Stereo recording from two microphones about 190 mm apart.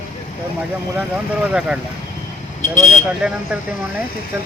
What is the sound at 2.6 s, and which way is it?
Speech, 40° left (ahead or behind).